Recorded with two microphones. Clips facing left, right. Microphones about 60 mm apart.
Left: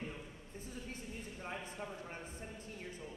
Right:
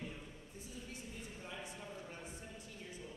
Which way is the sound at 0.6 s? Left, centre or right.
Left.